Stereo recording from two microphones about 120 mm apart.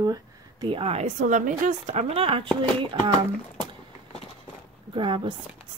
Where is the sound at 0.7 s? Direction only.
50° right (ahead or behind).